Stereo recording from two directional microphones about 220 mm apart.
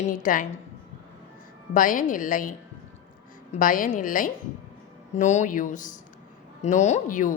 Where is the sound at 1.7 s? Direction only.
35° left (ahead or behind).